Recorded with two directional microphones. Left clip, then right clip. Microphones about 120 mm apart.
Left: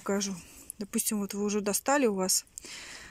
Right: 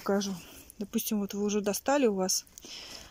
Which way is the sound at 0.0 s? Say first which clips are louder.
Right 2 dB; centre (ahead or behind).